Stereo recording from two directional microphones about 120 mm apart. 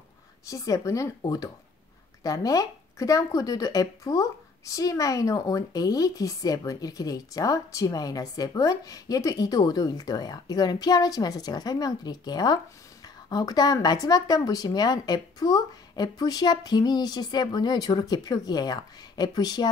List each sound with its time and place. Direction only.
0.5 s speech: 30° left (ahead or behind)